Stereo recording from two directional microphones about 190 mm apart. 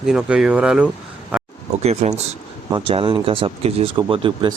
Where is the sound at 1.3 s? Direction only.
5° right (ahead or behind).